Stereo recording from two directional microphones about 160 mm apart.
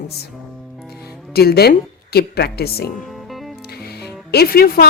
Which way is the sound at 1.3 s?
80° left.